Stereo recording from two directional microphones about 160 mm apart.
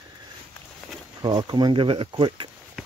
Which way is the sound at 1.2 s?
25° right (ahead or behind).